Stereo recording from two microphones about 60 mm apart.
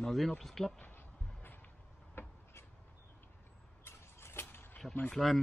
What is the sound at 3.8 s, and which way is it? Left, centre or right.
Vehicle, left.